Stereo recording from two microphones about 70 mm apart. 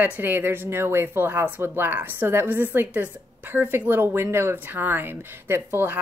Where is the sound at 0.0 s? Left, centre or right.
Right.